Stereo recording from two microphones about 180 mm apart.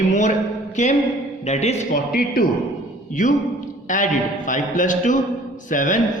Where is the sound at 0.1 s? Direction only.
40° left (ahead or behind).